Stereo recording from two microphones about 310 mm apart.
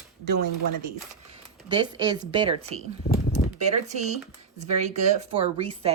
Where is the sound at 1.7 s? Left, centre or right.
Centre.